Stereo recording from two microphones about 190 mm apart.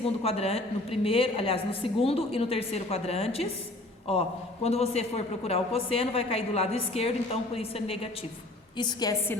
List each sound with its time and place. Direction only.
0.0 s a woman's voice: 30° left (ahead or behind); by 9.4 s 15° left (ahead or behind)